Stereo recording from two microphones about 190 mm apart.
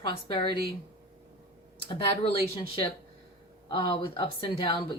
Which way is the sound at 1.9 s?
30° left (ahead or behind).